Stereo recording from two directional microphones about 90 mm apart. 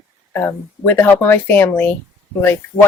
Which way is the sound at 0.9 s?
20° left (ahead or behind).